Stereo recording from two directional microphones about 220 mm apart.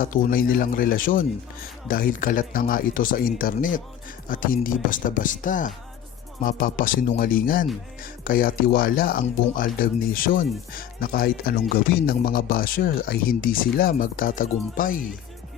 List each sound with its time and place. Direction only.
0.0 s speech: 40° left (ahead or behind)